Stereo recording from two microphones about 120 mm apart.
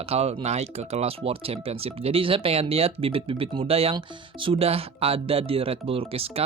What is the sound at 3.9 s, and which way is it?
Speech, 45° right (ahead or behind).